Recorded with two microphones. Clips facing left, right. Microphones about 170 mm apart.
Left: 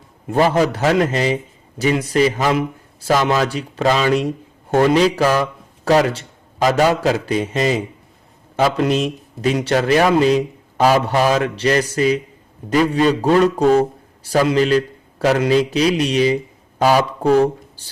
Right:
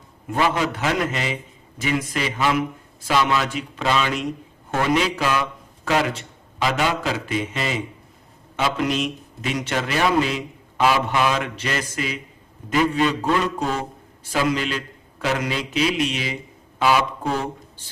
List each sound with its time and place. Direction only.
0.3 s a man's voice: 40° left (ahead or behind)